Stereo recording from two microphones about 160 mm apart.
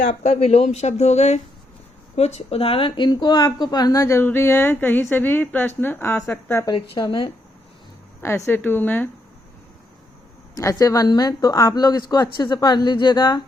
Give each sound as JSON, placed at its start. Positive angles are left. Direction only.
{"t": 0.0, "sound": "speech", "side_deg": 50}
{"t": 6.9, "sound": "speech", "side_deg": 30}
{"t": 8.4, "sound": "speech", "side_deg": 10}
{"t": 10.5, "sound": "speech", "side_deg": 20}